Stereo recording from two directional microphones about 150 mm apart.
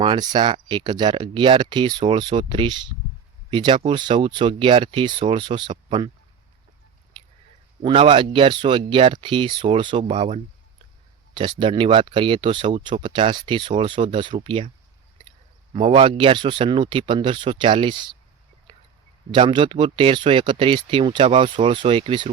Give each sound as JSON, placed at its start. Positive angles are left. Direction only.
{"t": 0.0, "sound": "speech", "side_deg": -30}
{"t": 7.1, "sound": "a sound", "side_deg": -30}
{"t": 7.8, "sound": "speech", "side_deg": -35}
{"t": 11.6, "sound": "speech", "side_deg": -35}
{"t": 15.7, "sound": "speech", "side_deg": -35}
{"t": 18.7, "sound": "a sound", "side_deg": -35}
{"t": 19.3, "sound": "speech", "side_deg": -35}